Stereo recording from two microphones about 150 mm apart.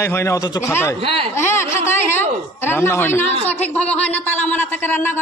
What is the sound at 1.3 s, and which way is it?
A woman's voice, 15° left (ahead or behind).